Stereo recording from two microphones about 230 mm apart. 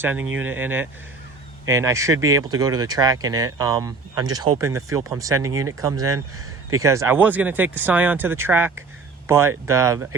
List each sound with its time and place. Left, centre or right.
0.0 s speech: centre